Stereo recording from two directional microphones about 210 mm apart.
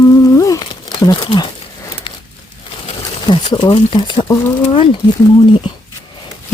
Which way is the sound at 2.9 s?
25° left (ahead or behind).